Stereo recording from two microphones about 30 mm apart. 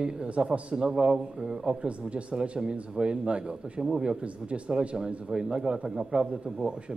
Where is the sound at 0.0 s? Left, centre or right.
Right.